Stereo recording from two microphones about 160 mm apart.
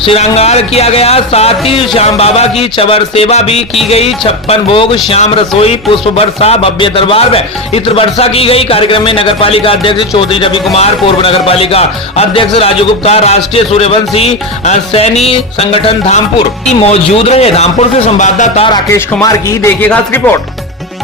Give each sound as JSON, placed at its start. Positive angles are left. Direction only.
{"t": 0.0, "sound": "speech", "side_deg": 40}
{"t": 18.9, "sound": "speech", "side_deg": 15}